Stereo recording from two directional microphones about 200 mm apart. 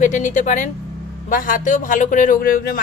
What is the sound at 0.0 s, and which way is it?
A woman's voice, 40° left (ahead or behind).